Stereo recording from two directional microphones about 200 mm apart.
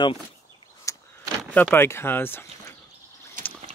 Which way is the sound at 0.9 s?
15° left (ahead or behind).